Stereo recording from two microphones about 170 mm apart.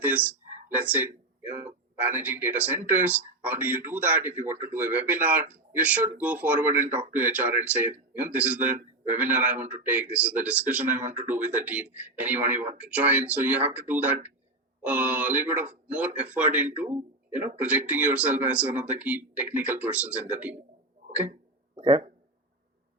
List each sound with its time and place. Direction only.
0.0 s speech: 10° right (ahead or behind)
21.8 s a man's voice: 25° right (ahead or behind)